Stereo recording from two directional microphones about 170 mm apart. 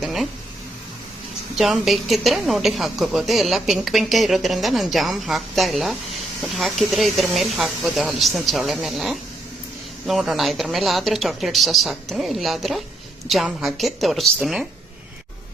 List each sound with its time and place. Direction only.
0.0 s a woman's voice: centre (ahead or behind)
1.5 s a woman's voice: centre (ahead or behind)